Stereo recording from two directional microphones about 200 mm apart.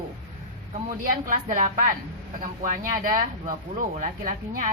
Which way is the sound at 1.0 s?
40° right (ahead or behind).